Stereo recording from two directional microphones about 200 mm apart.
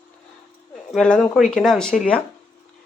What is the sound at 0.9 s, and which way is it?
Speech, 5° left (ahead or behind).